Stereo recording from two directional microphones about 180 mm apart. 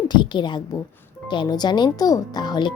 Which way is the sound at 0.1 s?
25° left (ahead or behind).